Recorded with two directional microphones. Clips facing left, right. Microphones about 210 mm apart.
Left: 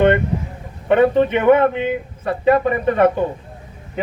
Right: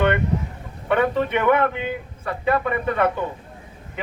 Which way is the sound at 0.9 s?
30° left (ahead or behind).